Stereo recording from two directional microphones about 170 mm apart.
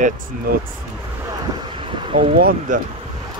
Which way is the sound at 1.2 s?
25° right (ahead or behind).